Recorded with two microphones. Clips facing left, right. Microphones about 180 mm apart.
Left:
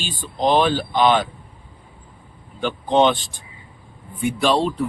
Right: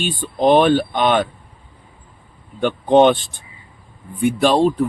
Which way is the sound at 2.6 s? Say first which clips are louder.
Right 5 dB; 55° right (ahead or behind).